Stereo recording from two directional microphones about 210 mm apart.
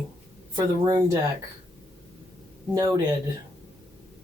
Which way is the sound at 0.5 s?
20° right (ahead or behind).